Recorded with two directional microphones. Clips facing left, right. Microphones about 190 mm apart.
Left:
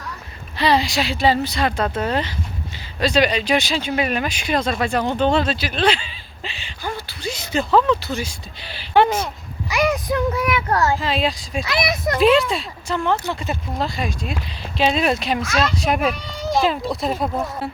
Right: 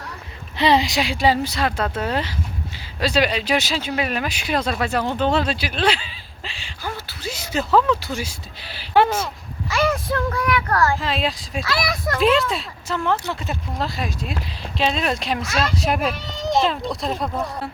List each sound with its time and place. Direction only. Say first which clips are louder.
0.5 s speech: right 1 dB; 20° right (ahead or behind)
9.6 s a child's voice: left 1 dB; 15° left (ahead or behind)
11.0 s speech: left 2 dB; centre (ahead or behind)
11.6 s a child's voice: left 2 dB; 20° left (ahead or behind)
12.2 s speech: left 3 dB; centre (ahead or behind)